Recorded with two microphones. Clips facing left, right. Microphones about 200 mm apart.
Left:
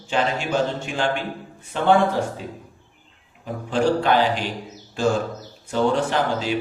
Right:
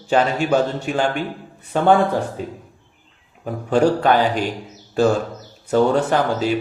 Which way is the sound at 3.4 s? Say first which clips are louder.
Right 5 dB; 45° right (ahead or behind).